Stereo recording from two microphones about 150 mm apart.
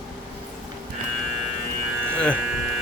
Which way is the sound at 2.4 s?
5° right (ahead or behind).